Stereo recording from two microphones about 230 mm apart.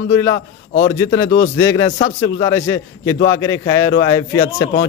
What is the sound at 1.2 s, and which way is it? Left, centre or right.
Speech, left.